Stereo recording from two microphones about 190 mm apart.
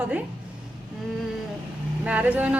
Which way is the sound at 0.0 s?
10° right (ahead or behind).